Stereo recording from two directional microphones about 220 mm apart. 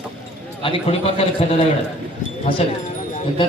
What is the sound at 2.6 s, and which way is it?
Speech, 30° left (ahead or behind).